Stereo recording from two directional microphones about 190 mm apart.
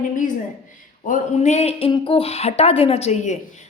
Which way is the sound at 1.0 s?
40° left (ahead or behind).